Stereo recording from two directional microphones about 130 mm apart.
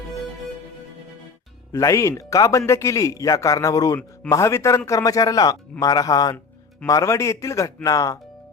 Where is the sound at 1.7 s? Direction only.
25° left (ahead or behind).